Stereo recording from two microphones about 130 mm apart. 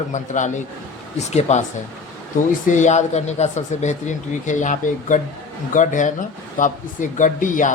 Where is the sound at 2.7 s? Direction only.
65° left (ahead or behind).